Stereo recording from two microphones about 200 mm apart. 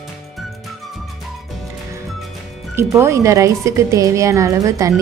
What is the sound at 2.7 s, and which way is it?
Speech, 15° right (ahead or behind).